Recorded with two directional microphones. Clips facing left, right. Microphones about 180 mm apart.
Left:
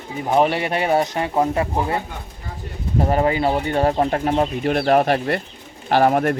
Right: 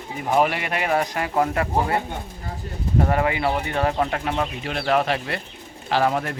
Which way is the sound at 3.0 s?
30° left (ahead or behind).